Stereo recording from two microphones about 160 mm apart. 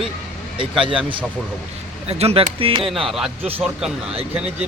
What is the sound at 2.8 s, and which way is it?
Speech, centre (ahead or behind).